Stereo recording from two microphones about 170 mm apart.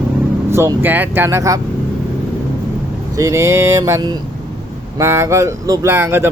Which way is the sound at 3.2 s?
15° right (ahead or behind).